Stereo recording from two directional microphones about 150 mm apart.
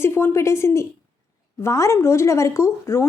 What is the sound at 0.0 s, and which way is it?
A woman's voice, 15° left (ahead or behind).